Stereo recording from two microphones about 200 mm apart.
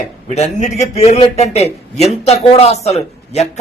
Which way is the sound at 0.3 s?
35° left (ahead or behind).